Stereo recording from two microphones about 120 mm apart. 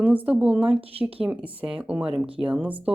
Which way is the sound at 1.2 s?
10° right (ahead or behind).